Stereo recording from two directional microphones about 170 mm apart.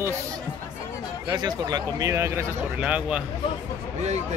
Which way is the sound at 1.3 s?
25° right (ahead or behind).